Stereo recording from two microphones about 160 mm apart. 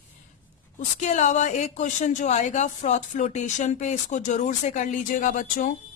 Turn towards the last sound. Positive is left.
turn(degrees=55)  # may be behind; listen again after turning